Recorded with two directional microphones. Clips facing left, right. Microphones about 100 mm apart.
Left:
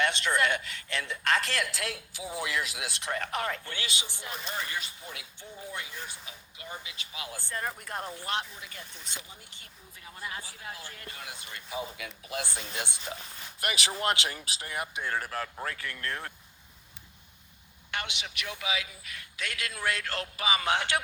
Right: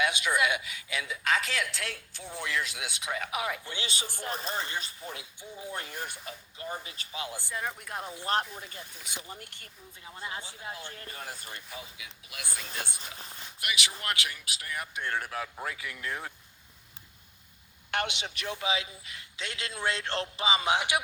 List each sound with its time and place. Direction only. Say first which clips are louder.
0.0 s a man's voice: even; 5° right (ahead or behind)
3.8 s speech: right 3 dB; 45° right (ahead or behind)
5.9 s speech: right 4 dB; 55° right (ahead or behind)
6.6 s speech: right 3 dB; 35° right (ahead or behind)
7.5 s a man's voice: left 2 dB; centre (ahead or behind)
8.3 s speech: right 6 dB; 40° right (ahead or behind)
9.3 s speech: right 6 dB; 55° right (ahead or behind)
10.0 s speech: right 1 dB; 25° right (ahead or behind)
12.3 s speech: left 5 dB; 30° left (ahead or behind)
13.6 s speech: left 2 dB; 40° left (ahead or behind)
14.0 s speech: left 5 dB; 25° left (ahead or behind)
14.9 s a man's voice: right 1 dB; 5° left (ahead or behind)
17.9 s speech: right 4 dB; 35° right (ahead or behind); by 21.0 s 15° right (ahead or behind)